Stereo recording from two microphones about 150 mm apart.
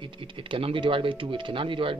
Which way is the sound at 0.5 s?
35° right (ahead or behind).